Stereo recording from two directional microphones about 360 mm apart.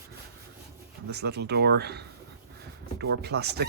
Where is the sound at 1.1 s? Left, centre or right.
Right.